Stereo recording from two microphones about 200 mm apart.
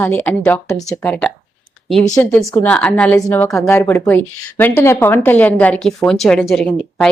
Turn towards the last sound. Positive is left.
turn(degrees=0)  # may be behind; listen again after turning